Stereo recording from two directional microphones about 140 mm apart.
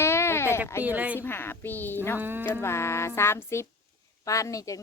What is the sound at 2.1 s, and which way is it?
Speech, 15° right (ahead or behind).